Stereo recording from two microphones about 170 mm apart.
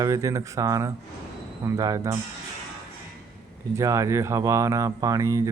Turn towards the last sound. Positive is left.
turn(degrees=-15)  # may be behind; listen again after turning